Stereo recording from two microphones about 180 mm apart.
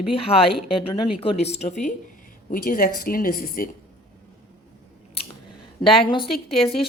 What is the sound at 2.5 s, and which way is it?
A woman's voice, 50° left (ahead or behind).